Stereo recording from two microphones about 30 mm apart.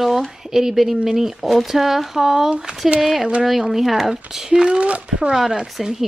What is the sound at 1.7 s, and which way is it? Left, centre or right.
Speech, centre.